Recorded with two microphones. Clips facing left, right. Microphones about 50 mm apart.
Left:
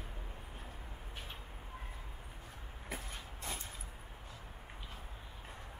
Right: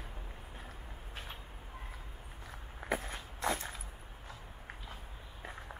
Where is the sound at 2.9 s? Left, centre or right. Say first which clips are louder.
Right 8 dB; right.